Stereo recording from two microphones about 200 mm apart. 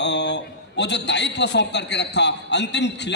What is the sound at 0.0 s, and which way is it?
A man's voice, 60° left (ahead or behind).